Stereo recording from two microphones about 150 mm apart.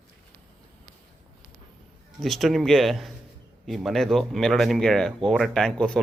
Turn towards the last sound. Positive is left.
turn(degrees=5)  # may be behind; listen again after turning